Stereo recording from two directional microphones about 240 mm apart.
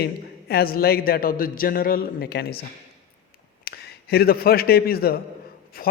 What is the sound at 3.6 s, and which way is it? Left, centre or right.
A man's voice, left.